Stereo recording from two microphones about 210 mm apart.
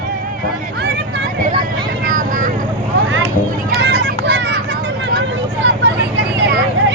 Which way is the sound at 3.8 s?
50° right (ahead or behind).